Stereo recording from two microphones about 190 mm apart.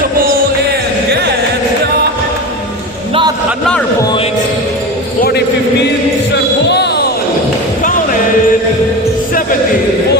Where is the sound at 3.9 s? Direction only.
20° left (ahead or behind).